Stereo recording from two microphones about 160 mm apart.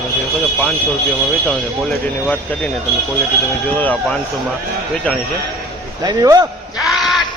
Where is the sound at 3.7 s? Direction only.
10° left (ahead or behind).